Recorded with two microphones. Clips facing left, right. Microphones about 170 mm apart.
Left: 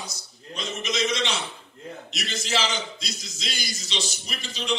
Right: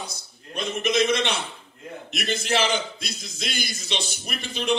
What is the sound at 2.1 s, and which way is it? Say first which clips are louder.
A man's voice: right 5 dB; 55° right (ahead or behind).